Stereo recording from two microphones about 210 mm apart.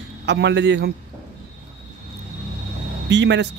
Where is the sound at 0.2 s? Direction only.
55° right (ahead or behind).